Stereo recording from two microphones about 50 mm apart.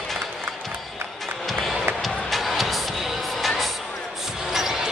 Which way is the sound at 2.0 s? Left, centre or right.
Centre.